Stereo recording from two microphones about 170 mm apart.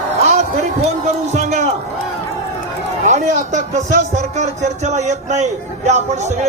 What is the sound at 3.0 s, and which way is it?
A man's voice, 50° right (ahead or behind).